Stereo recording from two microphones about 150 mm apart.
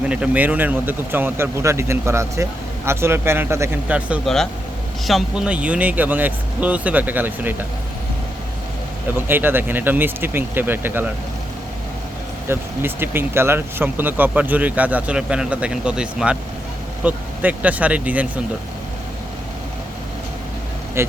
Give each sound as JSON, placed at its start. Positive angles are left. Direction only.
{"t": 0.1, "sound": "speech", "side_deg": -10}
{"t": 9.1, "sound": "speech", "side_deg": -15}
{"t": 12.5, "sound": "speech", "side_deg": -15}
{"t": 21.0, "sound": "speech", "side_deg": -15}